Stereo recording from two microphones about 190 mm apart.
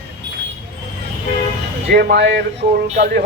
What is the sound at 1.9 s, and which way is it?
Speech, 55° right (ahead or behind).